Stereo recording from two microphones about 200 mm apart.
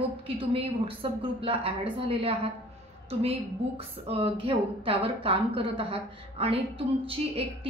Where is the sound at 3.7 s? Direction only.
30° right (ahead or behind).